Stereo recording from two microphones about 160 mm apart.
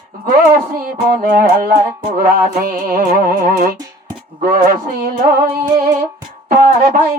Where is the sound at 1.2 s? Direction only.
65° right (ahead or behind).